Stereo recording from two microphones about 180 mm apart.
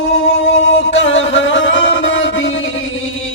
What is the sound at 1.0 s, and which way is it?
Music, 90° left.